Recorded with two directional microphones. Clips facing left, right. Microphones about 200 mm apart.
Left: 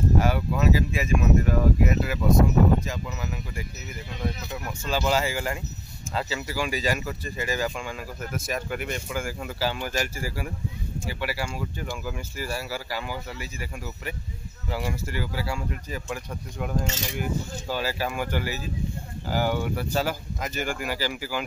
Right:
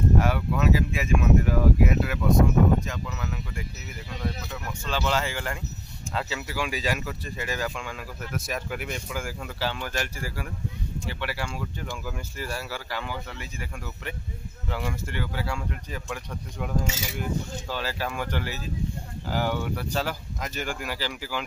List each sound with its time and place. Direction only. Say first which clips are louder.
0.2 s speech: left 1 dB; centre (ahead or behind)
4.8 s speech: left 3 dB; 10° left (ahead or behind)
16.8 s speech: left 1 dB; 5° right (ahead or behind)
17.2 s speech: even; 10° left (ahead or behind)